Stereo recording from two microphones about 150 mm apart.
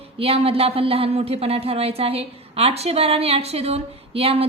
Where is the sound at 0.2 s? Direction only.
40° right (ahead or behind).